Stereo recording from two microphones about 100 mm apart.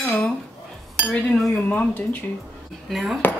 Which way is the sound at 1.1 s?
10° left (ahead or behind).